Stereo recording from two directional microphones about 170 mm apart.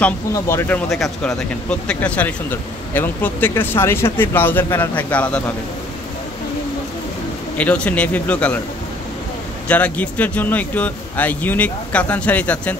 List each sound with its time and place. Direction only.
0.3 s speech: 15° left (ahead or behind)
0.8 s speech: centre (ahead or behind)
7.5 s speech: 10° left (ahead or behind)
9.7 s speech: 10° left (ahead or behind)